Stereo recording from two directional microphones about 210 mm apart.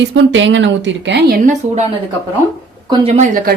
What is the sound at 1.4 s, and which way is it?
Speech, 35° right (ahead or behind).